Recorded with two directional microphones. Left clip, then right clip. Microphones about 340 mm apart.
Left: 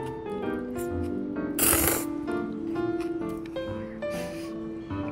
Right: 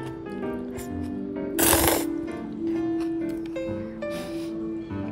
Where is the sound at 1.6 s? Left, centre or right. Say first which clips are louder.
Right 5 dB; right.